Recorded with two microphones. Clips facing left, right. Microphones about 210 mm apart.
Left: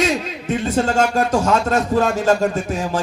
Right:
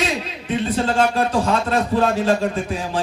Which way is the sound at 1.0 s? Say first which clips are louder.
Left 1 dB; 45° left (ahead or behind).